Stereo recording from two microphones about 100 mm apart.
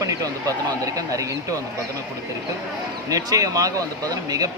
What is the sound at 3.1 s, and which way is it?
Speech, 35° right (ahead or behind).